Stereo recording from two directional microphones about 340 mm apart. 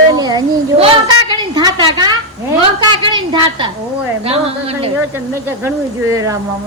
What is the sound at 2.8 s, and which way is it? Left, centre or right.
Speech, centre.